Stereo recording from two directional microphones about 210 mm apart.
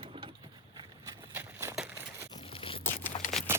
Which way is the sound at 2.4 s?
25° left (ahead or behind).